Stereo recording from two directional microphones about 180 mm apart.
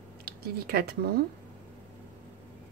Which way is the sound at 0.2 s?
55° right (ahead or behind).